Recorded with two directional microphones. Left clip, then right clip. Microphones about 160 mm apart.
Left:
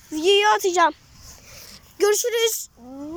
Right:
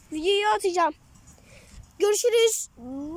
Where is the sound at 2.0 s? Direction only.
10° right (ahead or behind).